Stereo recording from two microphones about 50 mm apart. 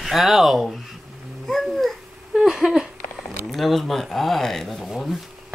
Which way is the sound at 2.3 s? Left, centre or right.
Centre.